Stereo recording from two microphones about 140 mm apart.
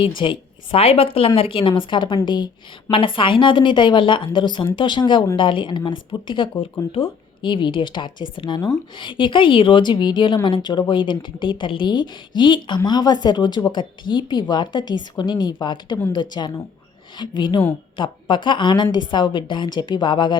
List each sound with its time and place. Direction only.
0.0 s speech: 35° left (ahead or behind)